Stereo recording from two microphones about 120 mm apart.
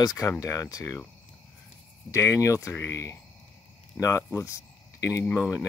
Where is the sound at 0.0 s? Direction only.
30° left (ahead or behind).